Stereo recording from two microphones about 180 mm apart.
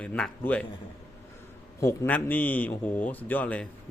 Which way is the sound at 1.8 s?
15° left (ahead or behind).